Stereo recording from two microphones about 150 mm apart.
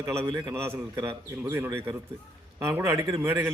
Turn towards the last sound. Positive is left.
turn(degrees=-20)  # may be behind; listen again after turning